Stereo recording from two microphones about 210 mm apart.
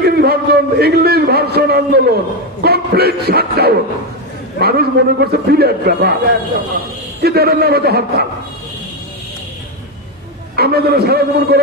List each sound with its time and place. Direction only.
0.0 s a man's voice: 50° right (ahead or behind)
7.2 s a man's voice: 50° right (ahead or behind)
10.5 s a man's voice: 50° right (ahead or behind)